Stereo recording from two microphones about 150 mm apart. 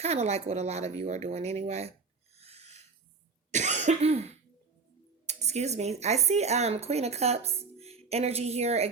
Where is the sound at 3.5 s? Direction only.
50° right (ahead or behind).